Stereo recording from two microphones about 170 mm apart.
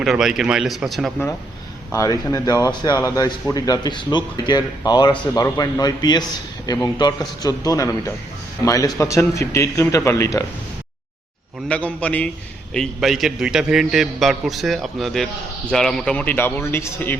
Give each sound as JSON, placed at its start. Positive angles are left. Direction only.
{"t": 0.0, "sound": "a man's voice", "side_deg": 0}
{"t": 1.9, "sound": "a man's voice", "side_deg": 20}
{"t": 11.7, "sound": "a man's voice", "side_deg": 5}